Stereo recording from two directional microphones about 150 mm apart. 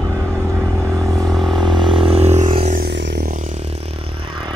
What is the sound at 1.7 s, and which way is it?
Music, 30° right (ahead or behind).